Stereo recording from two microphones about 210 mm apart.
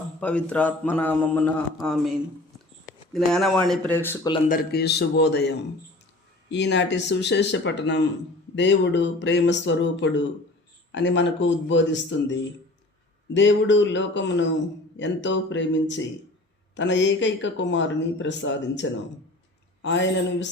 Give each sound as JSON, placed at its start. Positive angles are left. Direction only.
{"t": 0.2, "sound": "a man's voice", "side_deg": 5}
{"t": 4.4, "sound": "a man's voice", "side_deg": 45}